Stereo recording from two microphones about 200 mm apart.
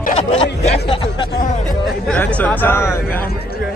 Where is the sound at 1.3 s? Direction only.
40° left (ahead or behind).